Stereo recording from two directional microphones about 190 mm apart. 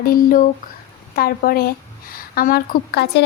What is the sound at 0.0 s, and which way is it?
A woman's voice, 45° left (ahead or behind).